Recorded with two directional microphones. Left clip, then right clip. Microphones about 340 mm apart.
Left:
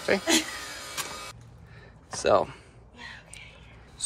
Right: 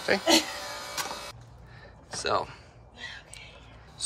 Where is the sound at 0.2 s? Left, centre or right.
Right.